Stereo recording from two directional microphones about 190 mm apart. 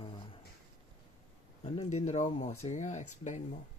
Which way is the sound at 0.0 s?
25° left (ahead or behind).